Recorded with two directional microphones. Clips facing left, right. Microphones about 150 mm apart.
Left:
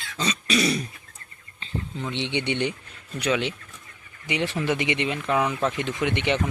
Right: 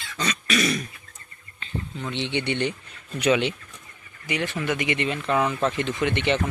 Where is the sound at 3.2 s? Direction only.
Centre (ahead or behind).